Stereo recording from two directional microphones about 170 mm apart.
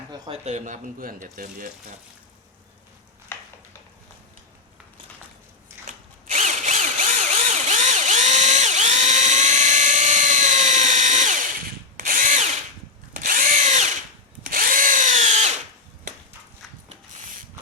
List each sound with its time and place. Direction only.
0.3 s speech: 40° right (ahead or behind)
5.8 s drill: 45° right (ahead or behind)
14.4 s drill: 55° right (ahead or behind)